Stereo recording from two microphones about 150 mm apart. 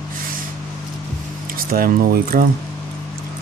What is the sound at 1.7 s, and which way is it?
Speech, 70° right (ahead or behind).